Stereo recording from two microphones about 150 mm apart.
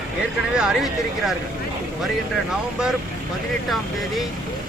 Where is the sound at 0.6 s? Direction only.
Centre (ahead or behind).